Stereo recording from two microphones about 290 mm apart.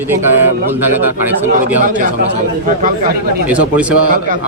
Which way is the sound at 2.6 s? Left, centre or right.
Right.